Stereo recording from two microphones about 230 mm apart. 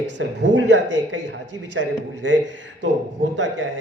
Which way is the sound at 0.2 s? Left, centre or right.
Right.